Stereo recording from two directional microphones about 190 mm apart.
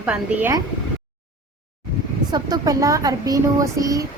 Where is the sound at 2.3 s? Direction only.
20° right (ahead or behind).